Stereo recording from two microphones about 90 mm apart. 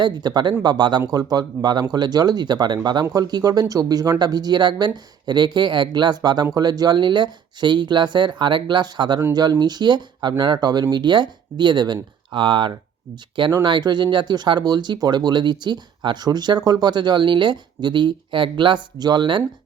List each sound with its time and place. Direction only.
0.0 s speech: 55° right (ahead or behind)
12.3 s speech: 65° right (ahead or behind)